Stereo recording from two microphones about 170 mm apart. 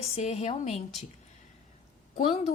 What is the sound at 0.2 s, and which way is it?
Speech, 40° left (ahead or behind).